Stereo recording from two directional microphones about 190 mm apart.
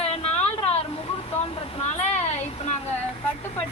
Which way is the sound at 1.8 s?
35° left (ahead or behind).